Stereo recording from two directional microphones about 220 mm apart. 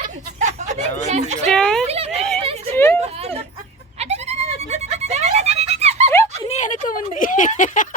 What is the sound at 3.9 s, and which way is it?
Goat, 30° right (ahead or behind).